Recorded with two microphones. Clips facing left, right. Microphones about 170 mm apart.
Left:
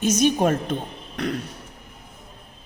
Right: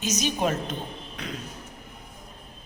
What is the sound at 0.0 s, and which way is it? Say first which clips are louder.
A woman's voice: left 7 dB; 55° left (ahead or behind).